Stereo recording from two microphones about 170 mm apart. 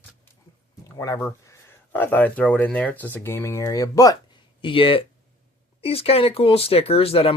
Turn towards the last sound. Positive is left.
turn(degrees=35)  # may be behind; listen again after turning